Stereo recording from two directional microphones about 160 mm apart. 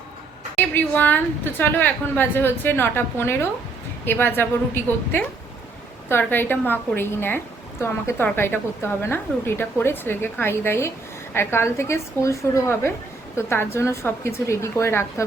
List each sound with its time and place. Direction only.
0.5 s a woman's voice: 10° left (ahead or behind)